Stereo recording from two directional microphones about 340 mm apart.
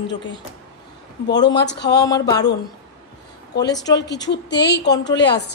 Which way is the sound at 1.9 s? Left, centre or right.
Centre.